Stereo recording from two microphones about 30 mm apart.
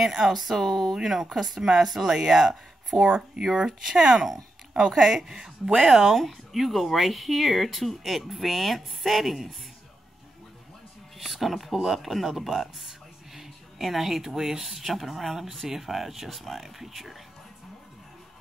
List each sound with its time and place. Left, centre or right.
0.3 s speech: centre
1.0 s speech: centre
1.6 s speech: centre
6.1 s speech: centre
6.5 s speech: centre
11.2 s speech: centre